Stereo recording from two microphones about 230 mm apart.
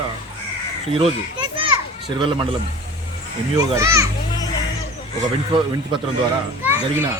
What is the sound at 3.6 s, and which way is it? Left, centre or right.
Speech, centre.